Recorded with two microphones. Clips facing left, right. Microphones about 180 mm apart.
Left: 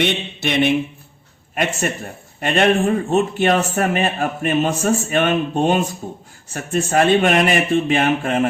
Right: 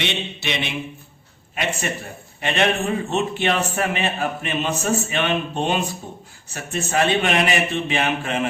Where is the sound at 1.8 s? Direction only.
50° left (ahead or behind).